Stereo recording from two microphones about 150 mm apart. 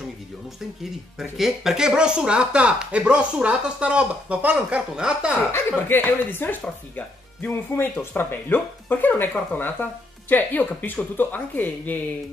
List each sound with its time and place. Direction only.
1.3 s speech: centre (ahead or behind)
5.5 s speech: 15° left (ahead or behind)